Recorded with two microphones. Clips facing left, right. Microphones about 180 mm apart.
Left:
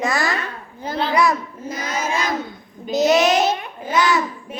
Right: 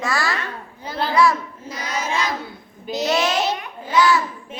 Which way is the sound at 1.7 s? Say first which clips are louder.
Left 1 dB; 50° left (ahead or behind).